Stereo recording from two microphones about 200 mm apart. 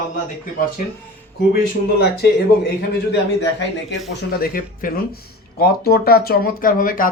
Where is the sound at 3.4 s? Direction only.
60° left (ahead or behind).